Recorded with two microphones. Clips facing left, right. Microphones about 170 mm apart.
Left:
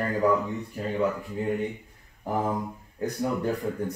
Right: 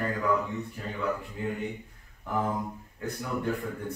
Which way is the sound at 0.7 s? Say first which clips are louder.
Left 7 dB; 30° left (ahead or behind).